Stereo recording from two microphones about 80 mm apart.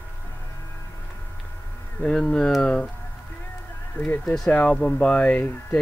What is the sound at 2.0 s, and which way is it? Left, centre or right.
Speech, centre.